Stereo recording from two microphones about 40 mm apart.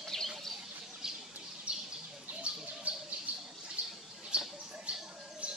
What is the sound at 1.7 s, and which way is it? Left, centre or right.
Bird, right.